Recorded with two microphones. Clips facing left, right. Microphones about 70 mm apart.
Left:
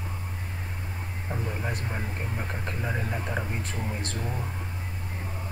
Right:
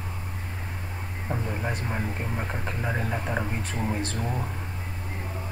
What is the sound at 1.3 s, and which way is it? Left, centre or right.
Speech, centre.